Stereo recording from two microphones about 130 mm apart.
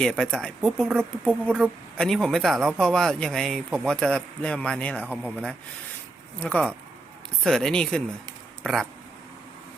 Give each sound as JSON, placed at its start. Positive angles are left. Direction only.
{"t": 0.0, "sound": "speech", "side_deg": 5}